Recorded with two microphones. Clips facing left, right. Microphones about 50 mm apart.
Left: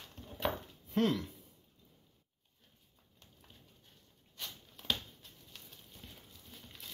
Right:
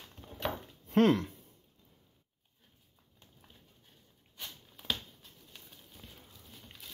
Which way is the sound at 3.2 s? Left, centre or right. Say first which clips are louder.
Right 1 dB; centre.